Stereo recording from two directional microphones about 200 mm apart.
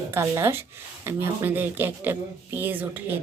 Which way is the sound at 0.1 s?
10° right (ahead or behind).